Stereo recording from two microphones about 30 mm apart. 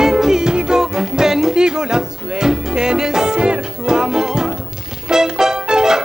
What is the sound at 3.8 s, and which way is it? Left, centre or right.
Music, centre.